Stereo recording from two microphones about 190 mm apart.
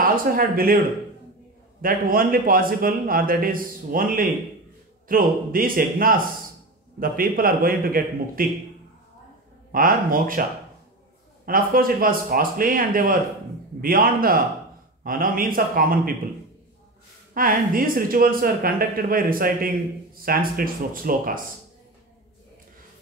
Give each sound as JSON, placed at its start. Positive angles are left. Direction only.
{"t": 0.0, "sound": "a man's voice", "side_deg": -50}
{"t": 9.7, "sound": "a man's voice", "side_deg": -50}
{"t": 11.4, "sound": "a man's voice", "side_deg": -50}
{"t": 17.3, "sound": "a man's voice", "side_deg": -45}